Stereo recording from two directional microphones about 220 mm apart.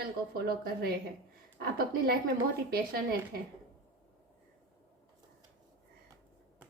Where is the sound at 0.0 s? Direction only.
45° right (ahead or behind).